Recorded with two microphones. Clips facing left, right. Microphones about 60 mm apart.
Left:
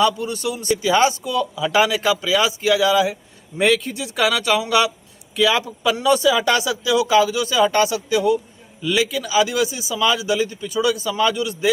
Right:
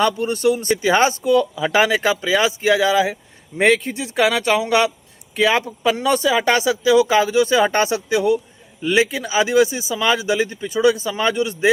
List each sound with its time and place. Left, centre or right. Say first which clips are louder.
0.0 s speech: right 2 dB; right